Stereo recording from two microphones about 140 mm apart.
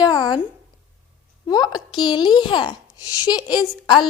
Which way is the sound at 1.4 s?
30° left (ahead or behind).